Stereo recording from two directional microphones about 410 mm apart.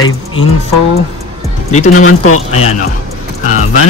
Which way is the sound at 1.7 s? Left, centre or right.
Centre.